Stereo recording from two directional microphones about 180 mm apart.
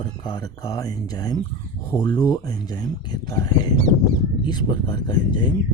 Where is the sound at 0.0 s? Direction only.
25° left (ahead or behind).